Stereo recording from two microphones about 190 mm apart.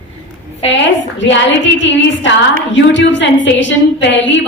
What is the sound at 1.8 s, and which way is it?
A man's voice, 75° left (ahead or behind).